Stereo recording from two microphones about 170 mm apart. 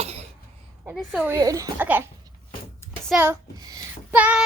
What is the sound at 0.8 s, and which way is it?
Speech, 5° right (ahead or behind).